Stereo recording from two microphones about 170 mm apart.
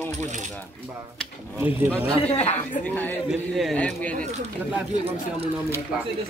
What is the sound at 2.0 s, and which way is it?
Speech, 15° right (ahead or behind).